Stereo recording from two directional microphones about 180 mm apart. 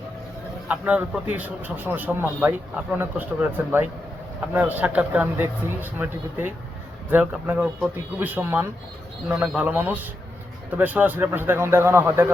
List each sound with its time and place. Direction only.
0.7 s speech: 10° right (ahead or behind)